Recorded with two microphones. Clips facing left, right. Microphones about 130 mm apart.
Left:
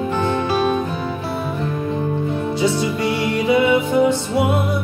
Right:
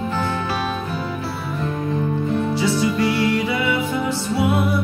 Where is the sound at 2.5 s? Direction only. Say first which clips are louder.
Left 1 dB; 20° left (ahead or behind).